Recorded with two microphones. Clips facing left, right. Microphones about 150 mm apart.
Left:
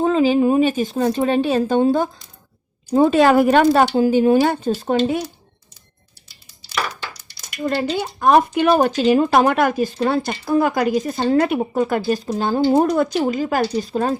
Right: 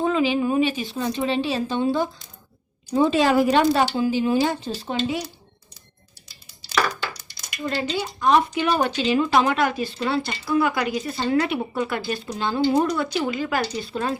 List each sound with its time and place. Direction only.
0.0 s speech: 40° left (ahead or behind)
4.4 s speech: 60° left (ahead or behind)
7.6 s speech: 50° left (ahead or behind)